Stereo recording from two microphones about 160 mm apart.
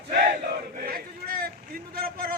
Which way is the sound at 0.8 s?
65° right (ahead or behind).